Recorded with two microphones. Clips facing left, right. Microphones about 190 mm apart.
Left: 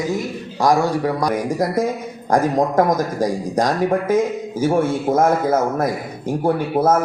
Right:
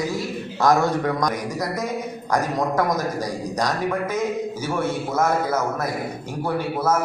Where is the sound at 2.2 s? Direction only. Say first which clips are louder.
Left 6 dB; 50° left (ahead or behind).